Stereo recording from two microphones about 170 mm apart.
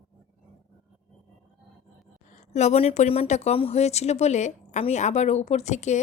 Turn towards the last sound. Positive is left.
turn(degrees=45)  # may be behind; listen again after turning